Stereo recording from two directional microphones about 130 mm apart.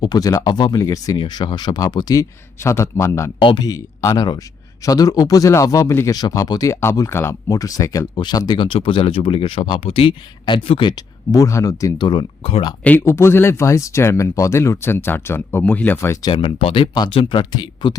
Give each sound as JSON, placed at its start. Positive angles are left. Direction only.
{"t": 0.0, "sound": "speech", "side_deg": 30}
{"t": 2.6, "sound": "speech", "side_deg": 20}
{"t": 3.4, "sound": "speech", "side_deg": 35}
{"t": 12.8, "sound": "speech", "side_deg": 15}
{"t": 16.2, "sound": "speech", "side_deg": 45}